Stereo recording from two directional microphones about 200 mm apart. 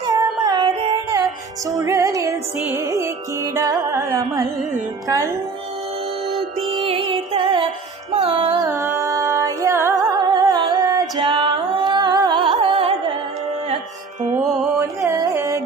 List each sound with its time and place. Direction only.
0.0 s music: 20° right (ahead or behind)
1.7 s music: 15° right (ahead or behind)
6.7 s music: 25° right (ahead or behind)
8.6 s music: 15° right (ahead or behind)
15.0 s carnatic music: 15° right (ahead or behind)